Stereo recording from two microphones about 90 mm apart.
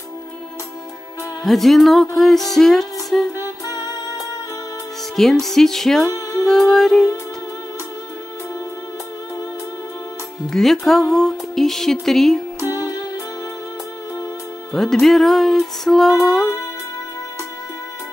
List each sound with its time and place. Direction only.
1.4 s music: centre (ahead or behind)
3.3 s music: 45° left (ahead or behind)
5.1 s music: 5° left (ahead or behind)
6.0 s music: 35° left (ahead or behind)
6.4 s music: 5° left (ahead or behind)
10.5 s music: centre (ahead or behind)
12.5 s music: 40° left (ahead or behind)
14.7 s music: 5° left (ahead or behind)